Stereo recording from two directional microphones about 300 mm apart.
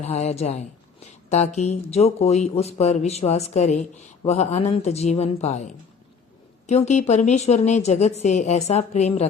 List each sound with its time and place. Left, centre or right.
0.0 s speech: left